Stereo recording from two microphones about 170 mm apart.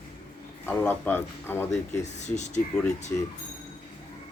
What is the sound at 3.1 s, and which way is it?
Speech, 10° left (ahead or behind).